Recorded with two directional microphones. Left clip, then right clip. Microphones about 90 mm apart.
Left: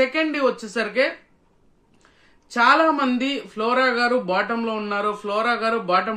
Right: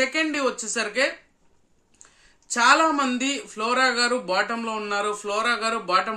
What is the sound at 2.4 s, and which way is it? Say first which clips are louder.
Speech: left 2 dB; 25° right (ahead or behind).